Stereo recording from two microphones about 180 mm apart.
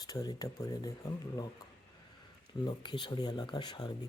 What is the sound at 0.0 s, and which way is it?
Speech, 20° left (ahead or behind).